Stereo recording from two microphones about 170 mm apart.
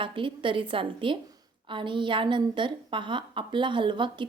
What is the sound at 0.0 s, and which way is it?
A woman's voice, 30° right (ahead or behind).